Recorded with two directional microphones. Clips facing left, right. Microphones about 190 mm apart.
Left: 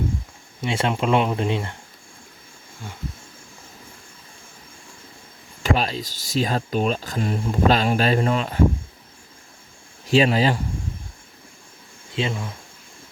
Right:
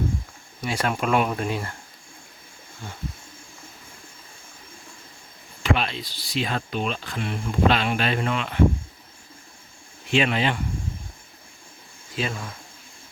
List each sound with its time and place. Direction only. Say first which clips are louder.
0.6 s speech: left 3 dB; 25° left (ahead or behind)
5.6 s speech: left 2 dB; 40° left (ahead or behind)
10.1 s speech: left 5 dB; 35° left (ahead or behind)
12.1 s speech: left 3 dB; 20° left (ahead or behind)